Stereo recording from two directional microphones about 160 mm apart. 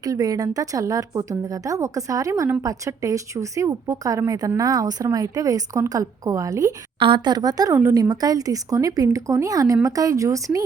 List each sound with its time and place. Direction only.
0.0 s a woman's voice: 20° right (ahead or behind)